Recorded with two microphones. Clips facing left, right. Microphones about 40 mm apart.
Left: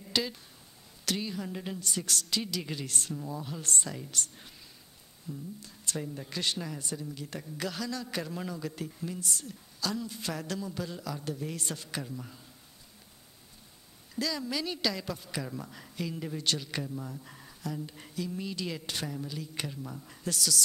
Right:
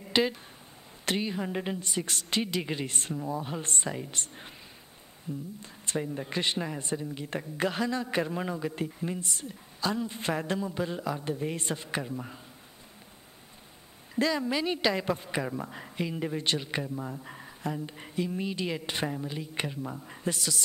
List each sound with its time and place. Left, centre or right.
0.0 s a sound: right
1.0 s a woman's voice: right
14.1 s speech: right